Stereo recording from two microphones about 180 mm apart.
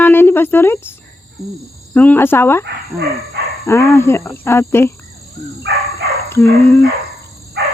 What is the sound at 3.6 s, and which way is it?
Speech, 15° left (ahead or behind).